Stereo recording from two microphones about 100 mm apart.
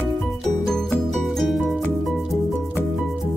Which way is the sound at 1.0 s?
Centre (ahead or behind).